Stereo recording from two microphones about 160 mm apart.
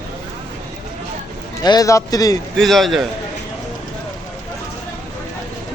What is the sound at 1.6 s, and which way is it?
Speech, 25° left (ahead or behind).